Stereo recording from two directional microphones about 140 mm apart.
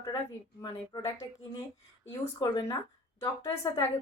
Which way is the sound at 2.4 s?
25° left (ahead or behind).